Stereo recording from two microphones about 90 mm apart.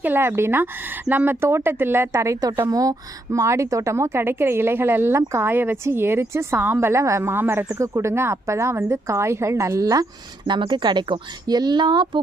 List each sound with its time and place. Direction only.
0.0 s speech: 25° right (ahead or behind)
2.5 s speech: 45° right (ahead or behind); by 7.8 s 20° right (ahead or behind)
7.8 s speech: 35° right (ahead or behind)
10.4 s speech: 60° right (ahead or behind)